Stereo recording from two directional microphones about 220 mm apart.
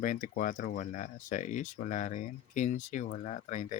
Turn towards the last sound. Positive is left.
turn(degrees=35)  # may be behind; listen again after turning